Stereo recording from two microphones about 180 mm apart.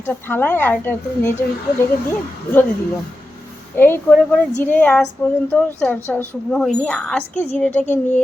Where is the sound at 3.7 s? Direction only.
10° left (ahead or behind).